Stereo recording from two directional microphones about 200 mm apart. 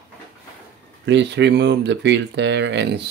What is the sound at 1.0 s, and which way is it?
Speech, 60° right (ahead or behind).